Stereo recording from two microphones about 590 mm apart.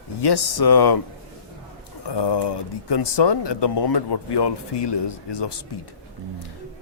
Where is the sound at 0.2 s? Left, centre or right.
Left.